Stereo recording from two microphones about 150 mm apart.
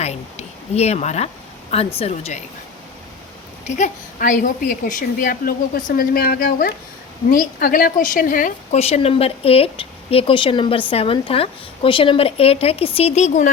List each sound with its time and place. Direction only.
0.0 s speech: 45° left (ahead or behind)
3.8 s a woman's voice: 55° left (ahead or behind)
8.8 s speech: 40° left (ahead or behind)